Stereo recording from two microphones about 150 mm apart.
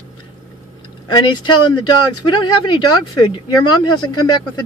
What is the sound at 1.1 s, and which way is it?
Speech, 30° left (ahead or behind).